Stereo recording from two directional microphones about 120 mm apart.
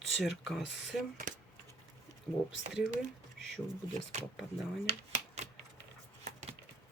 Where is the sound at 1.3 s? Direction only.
90° right.